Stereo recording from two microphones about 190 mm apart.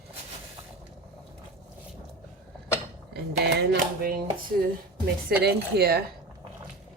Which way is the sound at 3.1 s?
55° right (ahead or behind).